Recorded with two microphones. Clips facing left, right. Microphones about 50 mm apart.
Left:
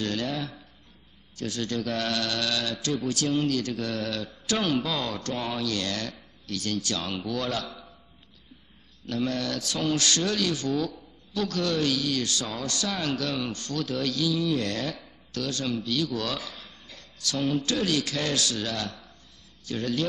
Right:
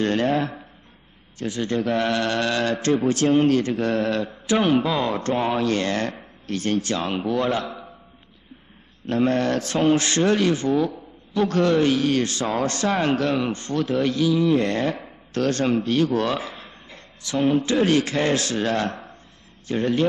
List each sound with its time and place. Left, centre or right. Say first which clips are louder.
0.0 s a man's voice: right 9 dB; right
1.4 s a man's voice: right 6 dB; right
9.0 s a man's voice: right 8 dB; right